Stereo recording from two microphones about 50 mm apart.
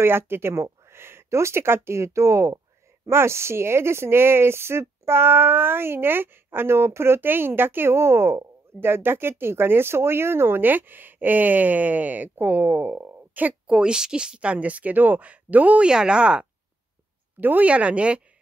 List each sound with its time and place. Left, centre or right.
0.0 s speech: right
3.1 s speech: right
13.7 s a woman's voice: centre
15.9 s speech: centre
17.4 s speech: right
17.6 s a woman's voice: right